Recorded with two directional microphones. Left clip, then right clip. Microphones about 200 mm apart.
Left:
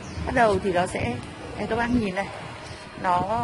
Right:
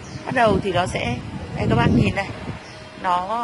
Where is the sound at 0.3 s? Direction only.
Centre (ahead or behind).